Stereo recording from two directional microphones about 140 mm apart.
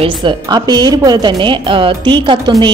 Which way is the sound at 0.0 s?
35° right (ahead or behind).